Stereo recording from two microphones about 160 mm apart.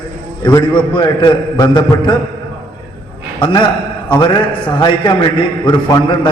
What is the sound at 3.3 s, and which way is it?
A man's voice, 30° left (ahead or behind).